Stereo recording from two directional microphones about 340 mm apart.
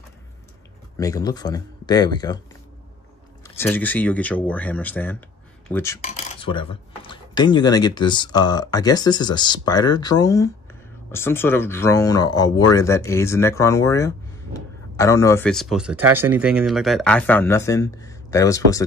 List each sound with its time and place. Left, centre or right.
0.9 s speech: centre
3.4 s speech: centre
5.9 s cutlery: centre
6.7 s speech: centre